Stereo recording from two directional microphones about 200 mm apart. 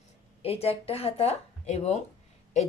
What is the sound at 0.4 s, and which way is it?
Speech, 30° left (ahead or behind).